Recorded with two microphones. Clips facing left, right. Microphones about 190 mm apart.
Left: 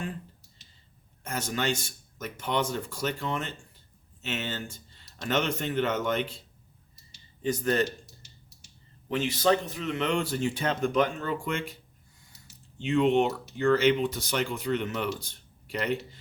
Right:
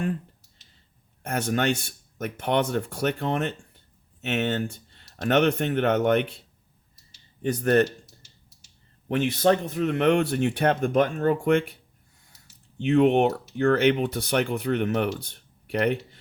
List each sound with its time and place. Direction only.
1.2 s speech: 60° right (ahead or behind)
7.4 s speech: 60° right (ahead or behind)
9.0 s speech: 60° right (ahead or behind)
12.8 s speech: 60° right (ahead or behind)